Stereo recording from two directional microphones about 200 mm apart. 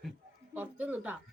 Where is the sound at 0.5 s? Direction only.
10° right (ahead or behind).